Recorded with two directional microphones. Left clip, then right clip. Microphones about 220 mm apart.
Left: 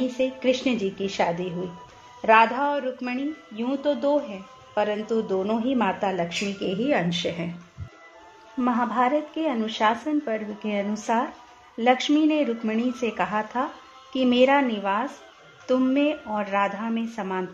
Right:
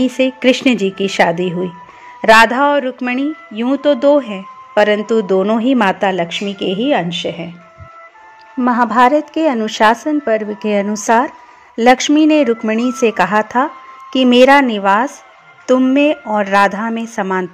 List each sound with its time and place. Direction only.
0.0 s speech: 35° right (ahead or behind)
8.5 s speech: 35° right (ahead or behind)